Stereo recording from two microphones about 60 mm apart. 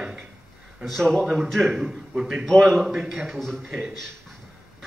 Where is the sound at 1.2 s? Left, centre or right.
Centre.